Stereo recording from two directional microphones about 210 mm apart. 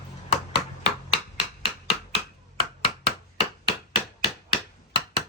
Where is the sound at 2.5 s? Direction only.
25° left (ahead or behind).